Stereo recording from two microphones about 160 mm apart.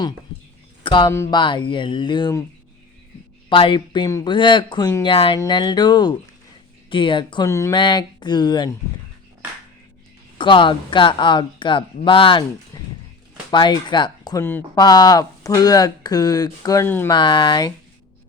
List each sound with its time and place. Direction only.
0.9 s speech: 30° left (ahead or behind)
1.1 s speech: 15° left (ahead or behind)
1.4 s speech: 30° left (ahead or behind)
3.5 s speech: 30° left (ahead or behind)
5.1 s speech: 35° left (ahead or behind)
7.4 s speech: 20° left (ahead or behind)
7.8 s speech: 30° left (ahead or behind)
10.3 s speech: 30° left (ahead or behind); by 17.1 s 15° left (ahead or behind)
17.1 s speech: 30° left (ahead or behind)